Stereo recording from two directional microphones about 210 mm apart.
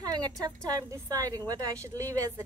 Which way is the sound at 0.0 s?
20° right (ahead or behind).